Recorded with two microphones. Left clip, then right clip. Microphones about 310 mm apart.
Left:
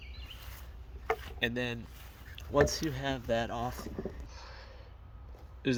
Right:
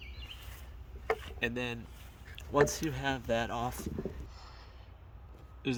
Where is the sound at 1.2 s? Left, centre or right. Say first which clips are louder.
Left 2 dB; centre.